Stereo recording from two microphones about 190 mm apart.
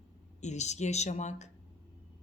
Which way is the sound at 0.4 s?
35° left (ahead or behind).